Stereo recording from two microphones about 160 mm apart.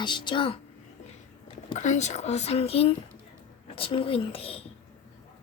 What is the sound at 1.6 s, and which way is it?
Speech, 50° left (ahead or behind).